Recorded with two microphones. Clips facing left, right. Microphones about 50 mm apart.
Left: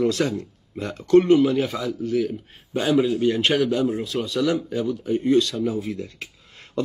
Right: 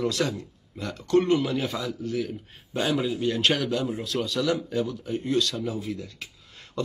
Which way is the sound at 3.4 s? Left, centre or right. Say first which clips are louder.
Left 4 dB; left.